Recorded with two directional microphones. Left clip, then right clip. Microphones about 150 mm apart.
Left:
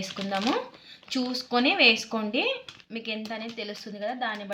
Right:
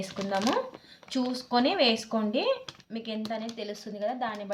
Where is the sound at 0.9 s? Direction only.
45° right (ahead or behind).